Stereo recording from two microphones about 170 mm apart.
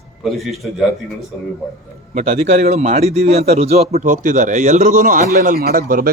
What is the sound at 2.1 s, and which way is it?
Speech, 40° right (ahead or behind).